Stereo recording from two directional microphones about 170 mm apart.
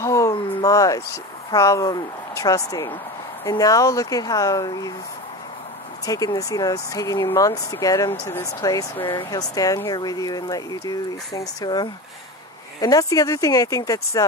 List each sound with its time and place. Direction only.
0.0 s a sound: 20° left (ahead or behind)
1.5 s speech: 20° left (ahead or behind)
6.0 s speech: 20° left (ahead or behind)